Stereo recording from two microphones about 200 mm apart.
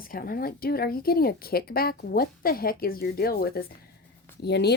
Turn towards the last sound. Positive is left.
turn(degrees=55)  # may be behind; listen again after turning